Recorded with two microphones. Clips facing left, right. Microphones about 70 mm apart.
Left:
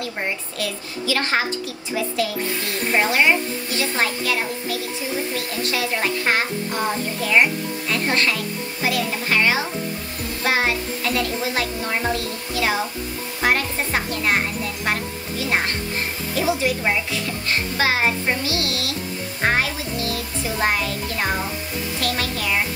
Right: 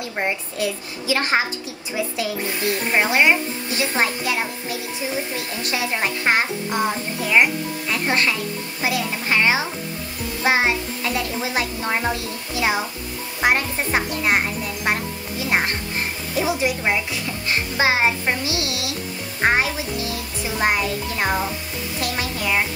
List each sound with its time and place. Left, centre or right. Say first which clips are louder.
0.6 s speech: right 2 dB; right
14.9 s music: right 2 dB; right
16.3 s a child's voice: even; right